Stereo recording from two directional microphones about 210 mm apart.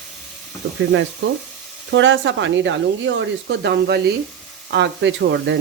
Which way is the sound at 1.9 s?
60° right (ahead or behind).